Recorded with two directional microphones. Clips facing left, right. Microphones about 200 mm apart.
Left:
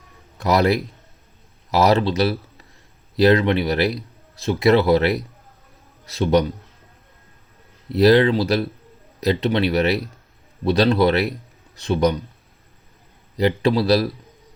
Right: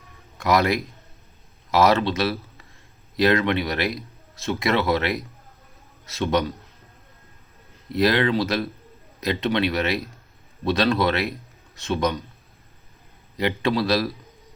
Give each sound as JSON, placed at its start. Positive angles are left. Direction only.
{"t": 0.3, "sound": "a man's voice", "side_deg": 35}
{"t": 7.9, "sound": "speech", "side_deg": 35}
{"t": 13.3, "sound": "speech", "side_deg": 30}